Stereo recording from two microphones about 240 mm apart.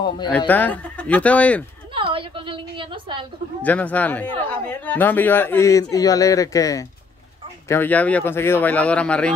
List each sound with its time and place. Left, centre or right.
0.5 s speech: centre
2.0 s a sound: right
3.6 s a man's voice: centre